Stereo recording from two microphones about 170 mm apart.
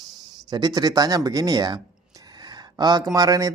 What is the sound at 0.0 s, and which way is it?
Speech, 25° right (ahead or behind).